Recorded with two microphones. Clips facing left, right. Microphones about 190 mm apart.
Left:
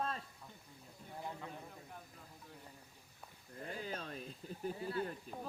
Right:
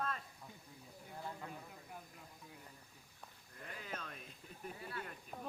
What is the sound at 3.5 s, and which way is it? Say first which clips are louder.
Speech: left 5 dB; 30° left (ahead or behind).